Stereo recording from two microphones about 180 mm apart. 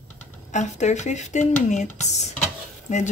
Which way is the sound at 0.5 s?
40° left (ahead or behind).